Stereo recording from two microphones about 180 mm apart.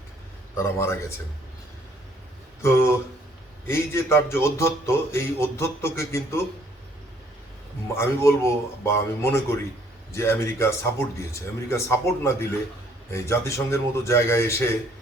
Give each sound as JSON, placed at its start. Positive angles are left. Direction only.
{"t": 2.6, "sound": "speech", "side_deg": 15}
{"t": 7.9, "sound": "speech", "side_deg": 15}